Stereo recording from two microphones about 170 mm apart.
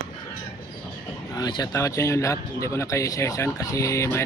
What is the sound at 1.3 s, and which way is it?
Speech, 25° left (ahead or behind).